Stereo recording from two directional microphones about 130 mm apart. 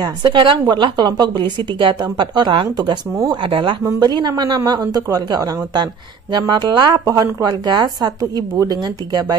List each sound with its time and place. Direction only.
0.0 s a woman's voice: 40° right (ahead or behind)